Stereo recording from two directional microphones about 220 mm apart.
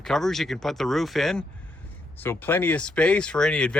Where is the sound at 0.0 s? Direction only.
Centre (ahead or behind).